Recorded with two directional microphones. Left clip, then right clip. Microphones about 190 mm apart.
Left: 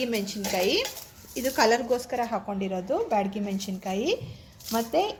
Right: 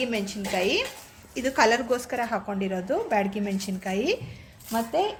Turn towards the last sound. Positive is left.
turn(degrees=20)  # may be behind; listen again after turning